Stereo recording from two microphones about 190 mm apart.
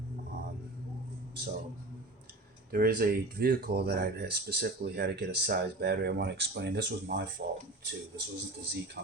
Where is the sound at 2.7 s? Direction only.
50° right (ahead or behind).